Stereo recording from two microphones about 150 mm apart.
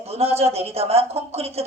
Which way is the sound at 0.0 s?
45° right (ahead or behind).